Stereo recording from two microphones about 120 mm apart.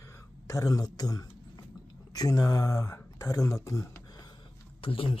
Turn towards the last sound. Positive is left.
turn(degrees=50)  # may be behind; listen again after turning